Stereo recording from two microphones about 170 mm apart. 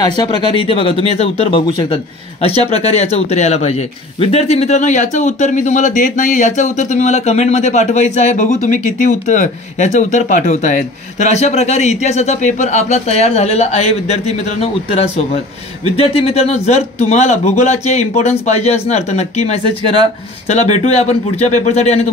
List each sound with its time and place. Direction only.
0.0 s speech: 25° left (ahead or behind)